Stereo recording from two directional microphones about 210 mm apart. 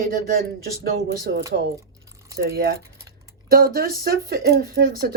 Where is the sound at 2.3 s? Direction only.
45° right (ahead or behind).